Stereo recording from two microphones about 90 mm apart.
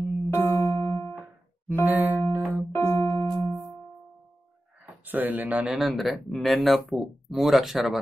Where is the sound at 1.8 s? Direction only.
20° right (ahead or behind).